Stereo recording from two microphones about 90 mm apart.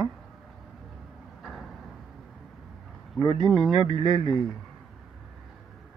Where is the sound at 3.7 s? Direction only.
70° right (ahead or behind).